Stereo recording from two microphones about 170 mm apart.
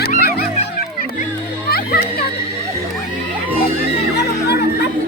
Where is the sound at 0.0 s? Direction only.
60° left (ahead or behind).